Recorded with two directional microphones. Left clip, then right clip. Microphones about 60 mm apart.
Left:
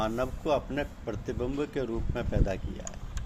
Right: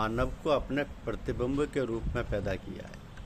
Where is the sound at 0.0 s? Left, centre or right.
Right.